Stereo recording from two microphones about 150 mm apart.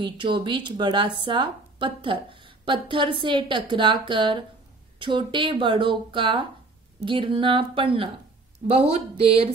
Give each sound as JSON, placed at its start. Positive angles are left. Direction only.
{"t": 0.0, "sound": "speech", "side_deg": -30}